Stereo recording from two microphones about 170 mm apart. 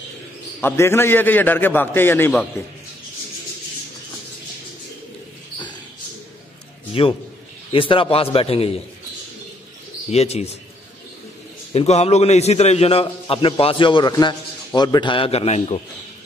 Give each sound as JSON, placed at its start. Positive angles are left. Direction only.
{"t": 0.6, "sound": "a man's voice", "side_deg": 15}
{"t": 6.9, "sound": "a man's voice", "side_deg": 35}
{"t": 10.1, "sound": "a man's voice", "side_deg": 40}
{"t": 11.7, "sound": "a man's voice", "side_deg": 40}